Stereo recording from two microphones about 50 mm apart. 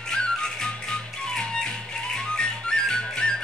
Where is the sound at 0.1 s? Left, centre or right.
Centre.